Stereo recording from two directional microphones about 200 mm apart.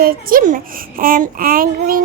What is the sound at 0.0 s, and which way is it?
A child's voice, 45° right (ahead or behind).